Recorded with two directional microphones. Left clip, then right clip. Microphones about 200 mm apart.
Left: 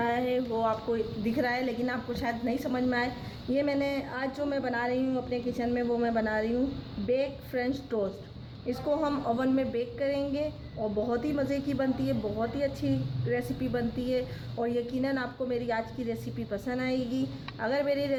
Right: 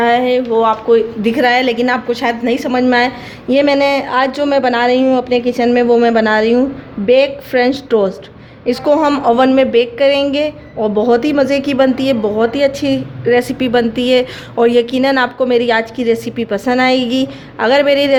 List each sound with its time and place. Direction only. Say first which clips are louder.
0.0 s a woman's voice: right 17 dB; 30° right (ahead or behind)